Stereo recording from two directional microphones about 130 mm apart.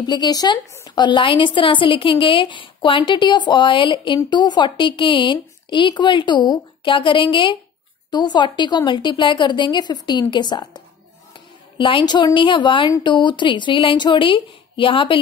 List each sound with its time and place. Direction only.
0.0 s a woman's voice: 35° left (ahead or behind)
11.8 s a woman's voice: 35° left (ahead or behind)